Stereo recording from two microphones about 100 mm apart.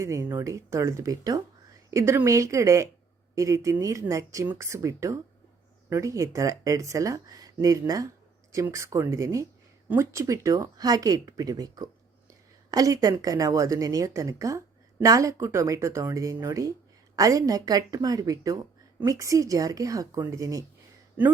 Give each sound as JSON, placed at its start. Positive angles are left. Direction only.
{"t": 0.0, "sound": "speech", "side_deg": -30}